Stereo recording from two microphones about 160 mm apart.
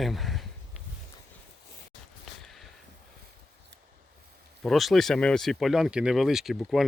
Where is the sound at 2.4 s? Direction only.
Centre (ahead or behind).